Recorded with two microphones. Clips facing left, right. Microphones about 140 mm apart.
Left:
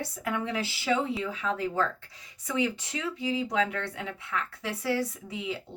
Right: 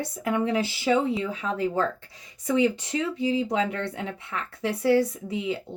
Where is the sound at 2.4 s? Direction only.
30° right (ahead or behind).